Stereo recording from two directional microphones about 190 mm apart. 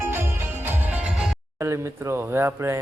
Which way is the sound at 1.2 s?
15° right (ahead or behind).